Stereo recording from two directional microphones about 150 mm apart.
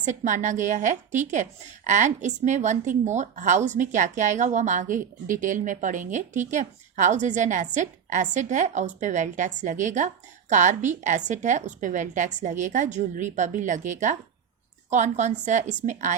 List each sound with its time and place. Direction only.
0.0 s a woman's voice: 55° right (ahead or behind)